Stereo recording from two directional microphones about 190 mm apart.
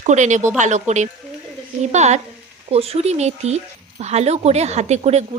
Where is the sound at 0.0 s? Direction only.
40° right (ahead or behind).